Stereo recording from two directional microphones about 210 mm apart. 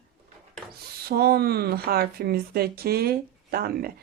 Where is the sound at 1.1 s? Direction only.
45° right (ahead or behind).